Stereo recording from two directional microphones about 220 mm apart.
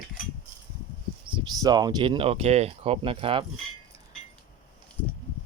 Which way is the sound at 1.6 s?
15° right (ahead or behind).